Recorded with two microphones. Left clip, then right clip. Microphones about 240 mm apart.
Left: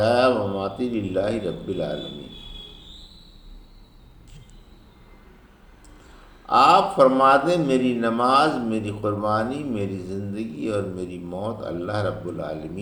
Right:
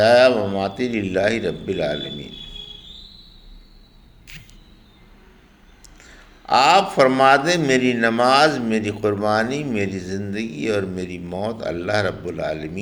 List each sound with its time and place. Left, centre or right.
0.0 s speech: right
6.4 s speech: right